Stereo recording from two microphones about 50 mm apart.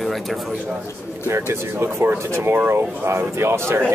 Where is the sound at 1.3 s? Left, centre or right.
Right.